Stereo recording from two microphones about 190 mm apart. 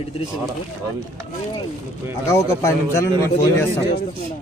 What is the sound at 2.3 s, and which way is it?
A man's voice, 15° left (ahead or behind).